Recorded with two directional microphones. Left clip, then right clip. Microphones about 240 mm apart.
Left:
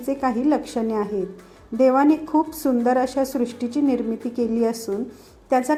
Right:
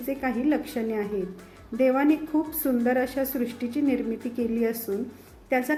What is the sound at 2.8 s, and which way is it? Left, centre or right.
A woman's voice, centre.